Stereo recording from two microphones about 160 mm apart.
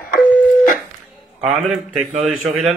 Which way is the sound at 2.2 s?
Centre (ahead or behind).